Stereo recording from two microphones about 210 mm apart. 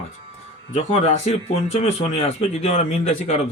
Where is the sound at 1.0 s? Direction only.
30° left (ahead or behind).